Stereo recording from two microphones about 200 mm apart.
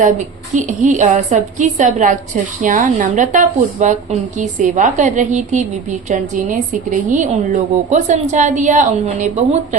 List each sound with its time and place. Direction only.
0.5 s a woman's voice: 35° right (ahead or behind)